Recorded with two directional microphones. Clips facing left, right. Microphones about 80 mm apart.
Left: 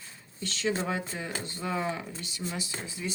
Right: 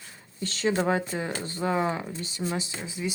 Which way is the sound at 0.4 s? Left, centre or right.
Right.